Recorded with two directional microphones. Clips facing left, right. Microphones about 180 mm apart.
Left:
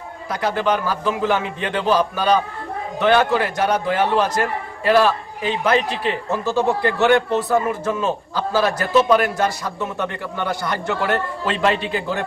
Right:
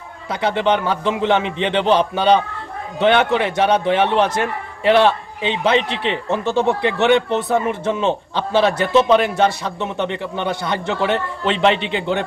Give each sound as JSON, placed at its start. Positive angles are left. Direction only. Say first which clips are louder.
{"t": 0.3, "sound": "a man's voice", "louder": "right 2 dB", "side_deg": -25}